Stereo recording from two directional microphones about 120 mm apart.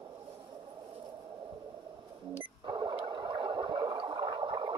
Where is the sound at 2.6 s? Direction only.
40° right (ahead or behind).